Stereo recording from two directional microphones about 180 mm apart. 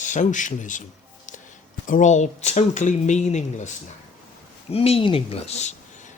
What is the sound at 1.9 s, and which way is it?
Speech, 40° left (ahead or behind).